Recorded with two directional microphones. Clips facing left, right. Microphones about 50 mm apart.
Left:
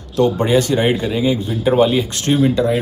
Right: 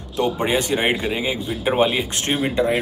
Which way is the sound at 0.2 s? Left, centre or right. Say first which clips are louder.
Left 6 dB; centre.